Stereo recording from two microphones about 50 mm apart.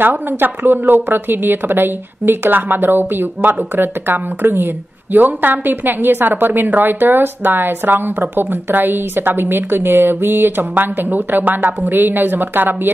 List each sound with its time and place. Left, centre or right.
0.0 s a woman's voice: right
5.1 s a woman's voice: right